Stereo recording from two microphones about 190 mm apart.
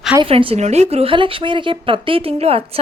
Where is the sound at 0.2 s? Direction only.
30° right (ahead or behind).